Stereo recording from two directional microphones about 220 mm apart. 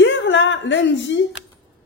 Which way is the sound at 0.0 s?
55° left (ahead or behind).